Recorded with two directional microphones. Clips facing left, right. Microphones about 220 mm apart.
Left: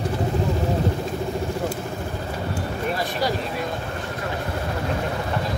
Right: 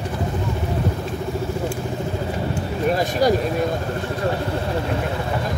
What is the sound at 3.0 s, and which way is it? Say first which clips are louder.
Speech: right 8 dB; 45° right (ahead or behind).